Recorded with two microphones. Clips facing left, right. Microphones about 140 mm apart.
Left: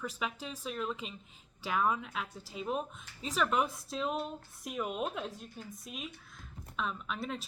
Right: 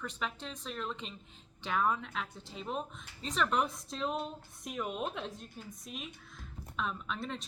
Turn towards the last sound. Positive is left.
turn(degrees=5)  # may be behind; listen again after turning